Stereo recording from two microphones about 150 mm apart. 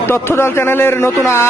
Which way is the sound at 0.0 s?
15° left (ahead or behind).